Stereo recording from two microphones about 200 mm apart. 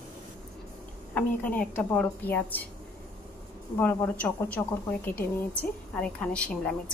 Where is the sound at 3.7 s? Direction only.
10° left (ahead or behind).